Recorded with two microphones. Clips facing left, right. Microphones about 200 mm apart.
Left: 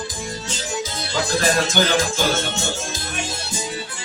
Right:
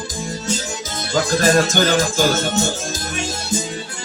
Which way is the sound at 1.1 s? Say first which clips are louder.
Right 5 dB; 45° right (ahead or behind).